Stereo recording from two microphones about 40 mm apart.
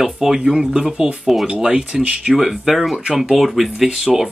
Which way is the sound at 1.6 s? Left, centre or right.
Right.